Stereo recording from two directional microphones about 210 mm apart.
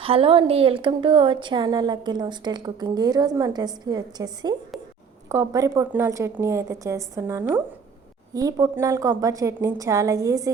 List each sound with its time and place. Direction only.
0.0 s a woman's voice: 25° right (ahead or behind)